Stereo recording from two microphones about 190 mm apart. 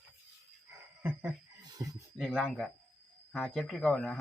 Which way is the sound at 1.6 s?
20° right (ahead or behind).